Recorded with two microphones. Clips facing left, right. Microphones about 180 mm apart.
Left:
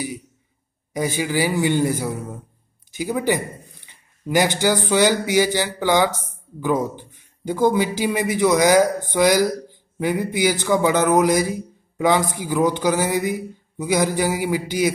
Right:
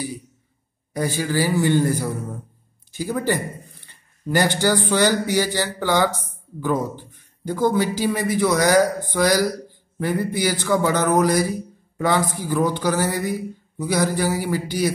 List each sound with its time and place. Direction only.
0.9 s a man's voice: 15° left (ahead or behind)
4.4 s a man's voice: 15° left (ahead or behind)